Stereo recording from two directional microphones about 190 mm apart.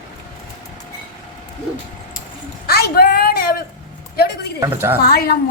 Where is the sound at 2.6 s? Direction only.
55° left (ahead or behind).